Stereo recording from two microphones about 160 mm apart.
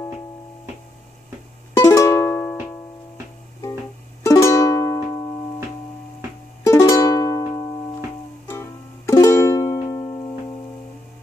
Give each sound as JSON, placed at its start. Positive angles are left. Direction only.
{"t": 1.7, "sound": "music", "side_deg": 15}
{"t": 4.2, "sound": "music", "side_deg": 20}
{"t": 6.6, "sound": "music", "side_deg": 20}